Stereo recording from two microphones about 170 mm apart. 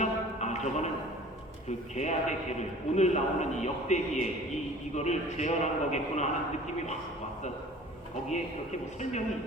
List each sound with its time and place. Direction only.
0.0 s a sound: 40° left (ahead or behind)
2.0 s a man's voice: 40° left (ahead or behind)
8.3 s a man's voice: 45° left (ahead or behind)